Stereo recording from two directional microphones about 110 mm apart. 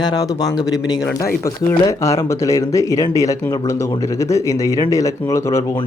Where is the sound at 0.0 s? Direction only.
35° left (ahead or behind).